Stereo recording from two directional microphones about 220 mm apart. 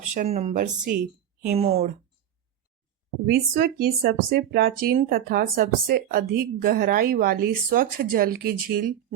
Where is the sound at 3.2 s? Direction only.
45° right (ahead or behind).